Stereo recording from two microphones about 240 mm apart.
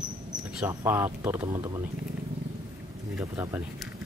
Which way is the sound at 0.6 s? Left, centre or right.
Centre.